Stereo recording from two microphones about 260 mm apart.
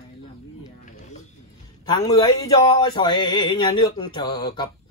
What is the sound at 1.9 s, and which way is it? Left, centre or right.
A man's voice, centre.